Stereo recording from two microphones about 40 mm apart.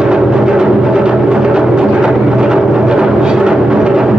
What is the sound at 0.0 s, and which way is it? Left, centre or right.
Music, centre.